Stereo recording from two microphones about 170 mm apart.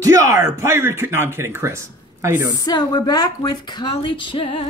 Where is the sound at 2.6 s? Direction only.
25° left (ahead or behind).